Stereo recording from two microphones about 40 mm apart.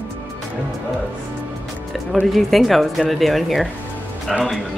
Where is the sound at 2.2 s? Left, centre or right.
Centre.